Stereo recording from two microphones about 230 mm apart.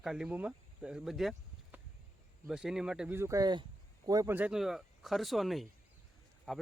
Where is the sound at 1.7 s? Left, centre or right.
Centre.